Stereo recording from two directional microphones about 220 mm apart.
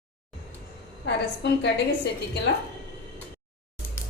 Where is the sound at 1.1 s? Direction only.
50° left (ahead or behind).